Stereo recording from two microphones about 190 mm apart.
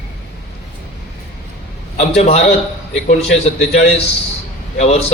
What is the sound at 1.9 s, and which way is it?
Speech, 35° left (ahead or behind).